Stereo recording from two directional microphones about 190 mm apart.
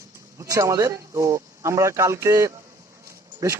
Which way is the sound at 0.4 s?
15° right (ahead or behind).